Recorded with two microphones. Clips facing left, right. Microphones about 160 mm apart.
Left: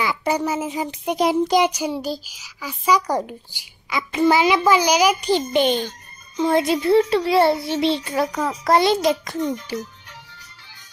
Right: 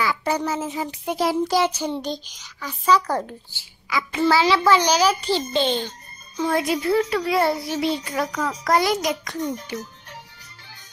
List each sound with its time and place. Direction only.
0.0 s a child's voice: 15° left (ahead or behind)